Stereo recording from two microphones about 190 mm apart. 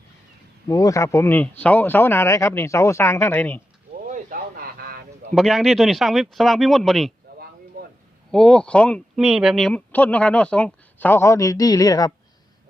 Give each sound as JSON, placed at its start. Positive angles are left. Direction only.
{"t": 0.7, "sound": "speech", "side_deg": 20}
{"t": 4.0, "sound": "a sound", "side_deg": -45}
{"t": 5.3, "sound": "speech", "side_deg": 0}
{"t": 8.3, "sound": "speech", "side_deg": 5}